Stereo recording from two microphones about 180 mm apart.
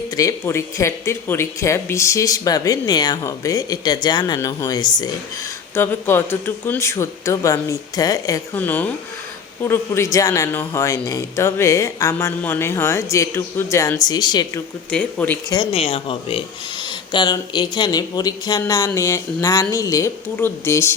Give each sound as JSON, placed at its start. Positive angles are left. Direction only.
{"t": 0.2, "sound": "speech", "side_deg": 15}
{"t": 5.7, "sound": "speech", "side_deg": 10}
{"t": 14.8, "sound": "speech", "side_deg": 10}
{"t": 15.7, "sound": "speech", "side_deg": 30}